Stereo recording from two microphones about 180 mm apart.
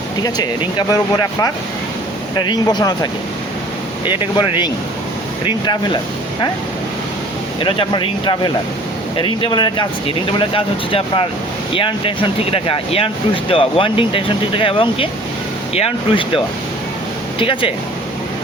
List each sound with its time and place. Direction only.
0.2 s speech: 20° left (ahead or behind)
5.5 s speech: 25° left (ahead or behind)
7.6 s speech: 30° left (ahead or behind)
17.4 s speech: 30° left (ahead or behind)